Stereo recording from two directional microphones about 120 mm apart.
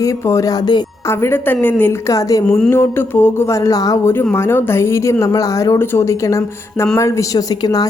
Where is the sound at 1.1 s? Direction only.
20° left (ahead or behind).